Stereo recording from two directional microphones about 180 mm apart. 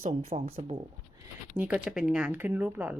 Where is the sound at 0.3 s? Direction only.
35° right (ahead or behind).